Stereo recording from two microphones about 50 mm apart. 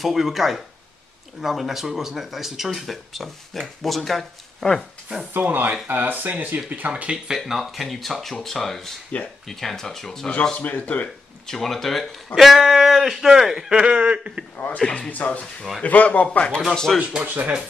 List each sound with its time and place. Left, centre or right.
0.0 s speech: centre
5.5 s speech: right
7.2 s speech: centre
10.6 s speech: left
11.4 s speech: centre; by 14.4 s right
14.8 s speech: centre
15.0 s speech: left
16.3 s speech: centre
16.7 s speech: centre
17.2 s speech: right